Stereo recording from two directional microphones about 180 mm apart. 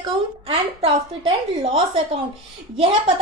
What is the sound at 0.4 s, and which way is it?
Speech, 30° right (ahead or behind).